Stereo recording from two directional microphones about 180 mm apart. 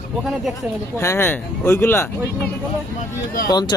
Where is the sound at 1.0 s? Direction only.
15° left (ahead or behind).